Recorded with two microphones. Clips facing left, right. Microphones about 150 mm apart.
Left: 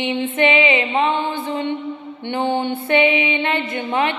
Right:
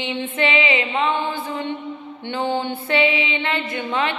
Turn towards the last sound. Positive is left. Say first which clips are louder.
# left 3 dB
turn(degrees=15)  # may be behind; listen again after turning